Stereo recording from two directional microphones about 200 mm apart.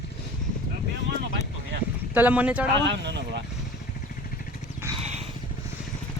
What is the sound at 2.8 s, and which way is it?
Vehicle, 60° right (ahead or behind).